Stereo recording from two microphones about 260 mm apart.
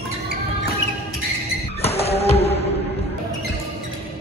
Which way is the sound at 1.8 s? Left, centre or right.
Left.